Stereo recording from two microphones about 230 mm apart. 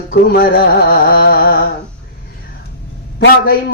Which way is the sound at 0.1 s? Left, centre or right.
Left.